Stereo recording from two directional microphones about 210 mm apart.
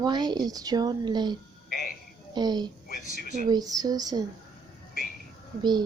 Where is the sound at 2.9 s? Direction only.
40° left (ahead or behind).